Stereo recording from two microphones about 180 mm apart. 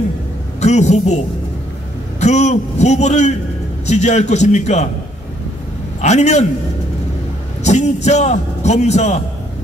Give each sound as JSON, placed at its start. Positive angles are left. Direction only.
{"t": 0.6, "sound": "a man's voice", "side_deg": 40}
{"t": 5.9, "sound": "a man's voice", "side_deg": 40}
{"t": 7.6, "sound": "a man's voice", "side_deg": 40}